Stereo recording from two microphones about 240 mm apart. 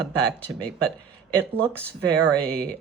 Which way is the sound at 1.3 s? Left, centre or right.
Centre.